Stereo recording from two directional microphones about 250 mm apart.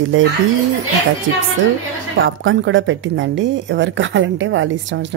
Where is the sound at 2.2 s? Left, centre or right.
Right.